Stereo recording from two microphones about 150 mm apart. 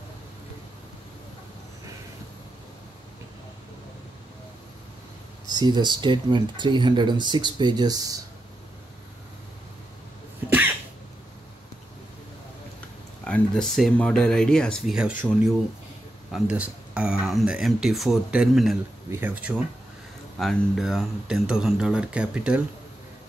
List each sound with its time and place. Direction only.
5.5 s speech: 30° right (ahead or behind)
13.2 s speech: 5° left (ahead or behind)
16.3 s speech: 10° right (ahead or behind)
19.0 s speech: 15° right (ahead or behind)
20.3 s speech: centre (ahead or behind)